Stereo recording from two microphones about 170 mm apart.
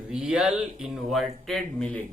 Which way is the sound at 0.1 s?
5° right (ahead or behind).